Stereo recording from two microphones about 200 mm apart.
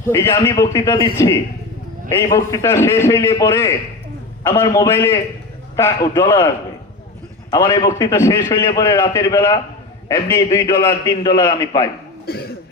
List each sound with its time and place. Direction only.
0.1 s a man's voice: 15° left (ahead or behind)
7.5 s a man's voice: 15° left (ahead or behind)
12.2 s speech: 50° left (ahead or behind)